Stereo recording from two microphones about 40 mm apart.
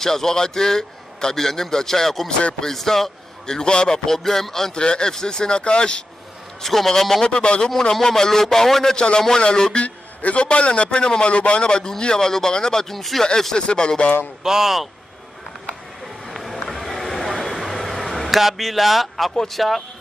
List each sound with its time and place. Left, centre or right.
0.0 s a man's voice: centre
4.8 s a man's voice: left
6.6 s a man's voice: centre
7.2 s a man's voice: left
8.9 s a man's voice: left
9.8 s a man's voice: left; by 12.9 s centre
12.9 s speech: centre
13.6 s a man's voice: left
14.4 s speech: centre
16.3 s run: centre
16.5 s a sound: centre
19.3 s speech: centre